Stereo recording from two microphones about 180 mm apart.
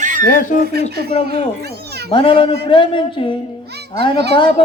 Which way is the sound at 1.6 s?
65° right (ahead or behind).